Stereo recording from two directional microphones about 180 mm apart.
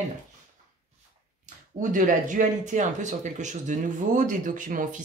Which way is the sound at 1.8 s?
45° right (ahead or behind).